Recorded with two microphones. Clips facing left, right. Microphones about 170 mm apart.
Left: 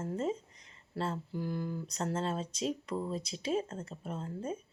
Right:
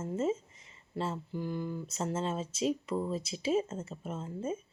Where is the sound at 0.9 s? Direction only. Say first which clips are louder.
Right 1 dB; 5° right (ahead or behind).